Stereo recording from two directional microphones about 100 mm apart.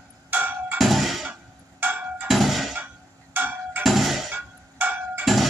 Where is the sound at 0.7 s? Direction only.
Centre (ahead or behind).